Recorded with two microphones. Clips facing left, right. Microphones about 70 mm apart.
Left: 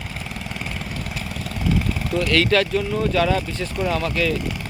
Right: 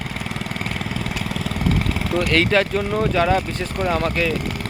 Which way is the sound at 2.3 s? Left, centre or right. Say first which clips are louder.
Even; right.